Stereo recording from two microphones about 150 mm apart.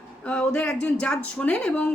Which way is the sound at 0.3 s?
5° left (ahead or behind).